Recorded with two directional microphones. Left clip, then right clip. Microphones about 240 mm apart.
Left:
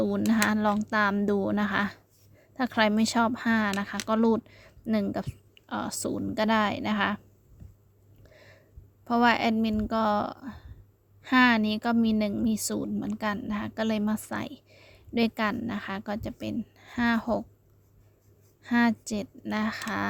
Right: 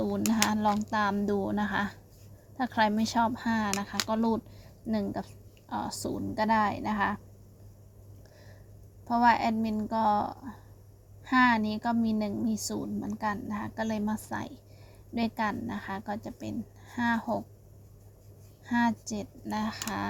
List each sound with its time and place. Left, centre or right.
0.0 s a woman's voice: left
9.0 s a woman's voice: left
18.6 s speech: left